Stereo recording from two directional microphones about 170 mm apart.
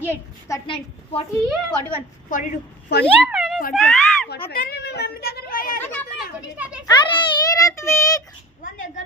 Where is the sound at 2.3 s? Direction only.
50° left (ahead or behind).